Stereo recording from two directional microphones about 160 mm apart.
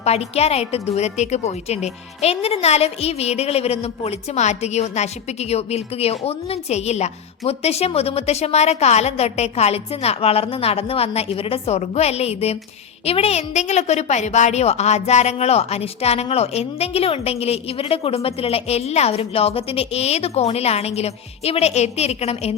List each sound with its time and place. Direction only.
0.0 s a woman's voice: 40° left (ahead or behind)